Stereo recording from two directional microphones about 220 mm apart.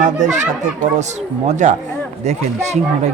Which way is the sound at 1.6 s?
35° right (ahead or behind).